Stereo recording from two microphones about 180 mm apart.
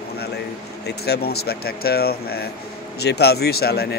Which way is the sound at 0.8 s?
60° left (ahead or behind).